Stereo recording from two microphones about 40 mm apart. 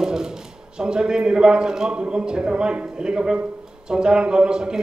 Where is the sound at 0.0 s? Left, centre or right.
Centre.